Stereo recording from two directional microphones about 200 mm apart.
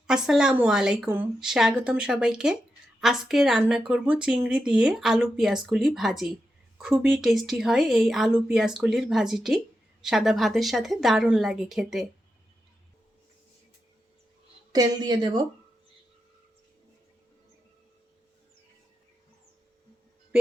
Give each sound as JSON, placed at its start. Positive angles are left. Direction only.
{"t": 0.1, "sound": "speech", "side_deg": -5}
{"t": 14.7, "sound": "speech", "side_deg": -20}